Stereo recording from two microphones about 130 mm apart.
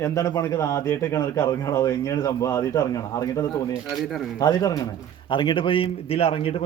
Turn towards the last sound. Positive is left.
turn(degrees=45)  # may be behind; listen again after turning